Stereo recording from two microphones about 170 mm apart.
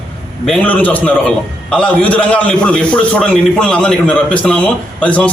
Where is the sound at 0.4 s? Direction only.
5° left (ahead or behind).